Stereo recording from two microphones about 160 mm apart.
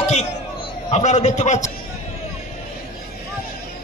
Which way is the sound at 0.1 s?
40° left (ahead or behind).